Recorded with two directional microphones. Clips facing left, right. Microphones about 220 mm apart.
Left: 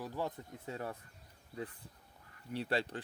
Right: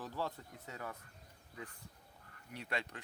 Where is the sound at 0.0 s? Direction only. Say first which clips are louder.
Left 2 dB; 15° left (ahead or behind).